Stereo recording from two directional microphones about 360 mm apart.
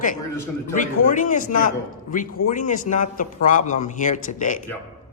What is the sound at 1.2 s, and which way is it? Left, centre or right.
A man's voice, left.